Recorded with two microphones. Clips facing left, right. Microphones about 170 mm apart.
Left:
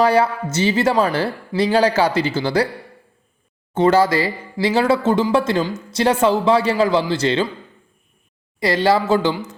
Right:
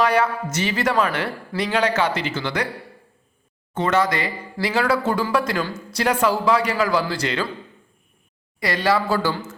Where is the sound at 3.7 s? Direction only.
30° left (ahead or behind).